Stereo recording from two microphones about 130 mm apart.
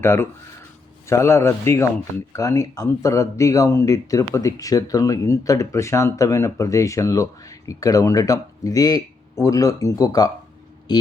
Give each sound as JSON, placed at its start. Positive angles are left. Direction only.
{"t": 0.0, "sound": "speech", "side_deg": 20}